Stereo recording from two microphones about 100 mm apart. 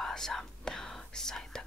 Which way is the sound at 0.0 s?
5° left (ahead or behind).